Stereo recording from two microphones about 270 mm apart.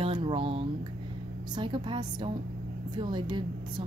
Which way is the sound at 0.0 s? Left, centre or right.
Centre.